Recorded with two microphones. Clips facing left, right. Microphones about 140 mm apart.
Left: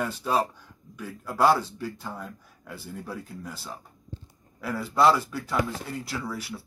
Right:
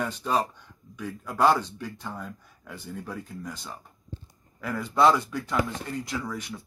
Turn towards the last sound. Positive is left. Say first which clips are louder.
# even
turn(degrees=5)  # may be behind; listen again after turning